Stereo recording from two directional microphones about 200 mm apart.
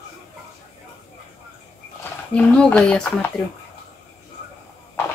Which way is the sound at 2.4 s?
5° left (ahead or behind).